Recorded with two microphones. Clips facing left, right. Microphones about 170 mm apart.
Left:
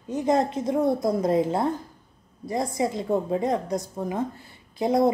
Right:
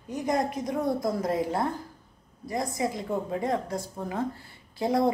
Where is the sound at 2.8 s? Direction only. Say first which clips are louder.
Left 7 dB; 25° left (ahead or behind).